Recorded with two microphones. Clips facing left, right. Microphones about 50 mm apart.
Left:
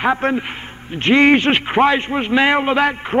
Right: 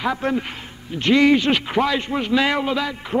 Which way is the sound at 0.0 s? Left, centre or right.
Left.